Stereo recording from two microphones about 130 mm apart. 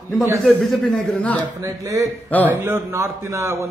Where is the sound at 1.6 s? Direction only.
25° right (ahead or behind).